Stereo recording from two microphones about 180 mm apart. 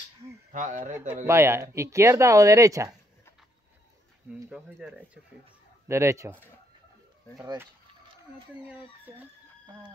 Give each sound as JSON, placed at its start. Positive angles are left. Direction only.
{"t": 0.5, "sound": "speech", "side_deg": -45}
{"t": 1.2, "sound": "speech", "side_deg": -15}
{"t": 4.5, "sound": "speech", "side_deg": -5}
{"t": 8.5, "sound": "speech", "side_deg": -10}